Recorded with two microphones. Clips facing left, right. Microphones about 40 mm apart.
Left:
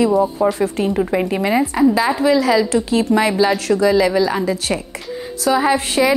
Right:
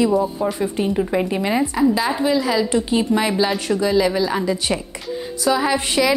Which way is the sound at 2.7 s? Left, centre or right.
Right.